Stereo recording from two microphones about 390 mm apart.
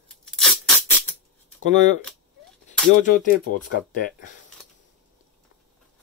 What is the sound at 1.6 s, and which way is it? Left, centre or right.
Speech, centre.